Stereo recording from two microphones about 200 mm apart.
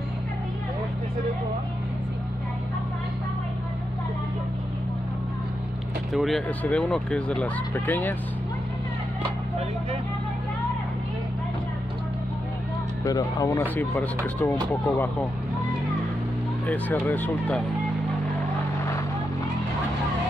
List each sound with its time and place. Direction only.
6.1 s speech: centre (ahead or behind)
13.0 s speech: 20° left (ahead or behind)
16.6 s speech: 10° left (ahead or behind)